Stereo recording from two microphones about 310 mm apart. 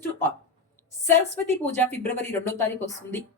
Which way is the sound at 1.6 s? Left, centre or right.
Centre.